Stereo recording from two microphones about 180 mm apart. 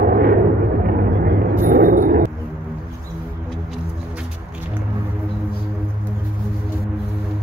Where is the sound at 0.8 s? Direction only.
55° right (ahead or behind).